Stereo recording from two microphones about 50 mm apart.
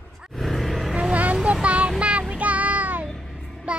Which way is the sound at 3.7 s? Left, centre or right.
Right.